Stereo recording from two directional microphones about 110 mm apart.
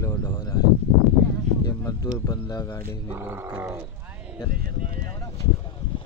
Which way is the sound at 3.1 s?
20° right (ahead or behind).